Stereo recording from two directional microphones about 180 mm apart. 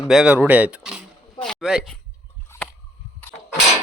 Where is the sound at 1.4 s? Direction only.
Centre (ahead or behind).